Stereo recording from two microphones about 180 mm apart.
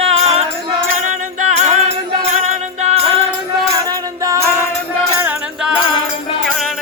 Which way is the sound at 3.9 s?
20° right (ahead or behind).